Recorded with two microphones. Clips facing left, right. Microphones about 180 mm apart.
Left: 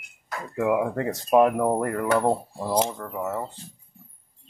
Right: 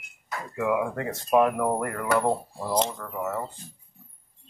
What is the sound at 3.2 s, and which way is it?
Speech, 15° left (ahead or behind).